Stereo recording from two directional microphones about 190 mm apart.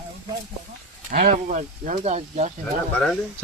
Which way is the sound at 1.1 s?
40° right (ahead or behind).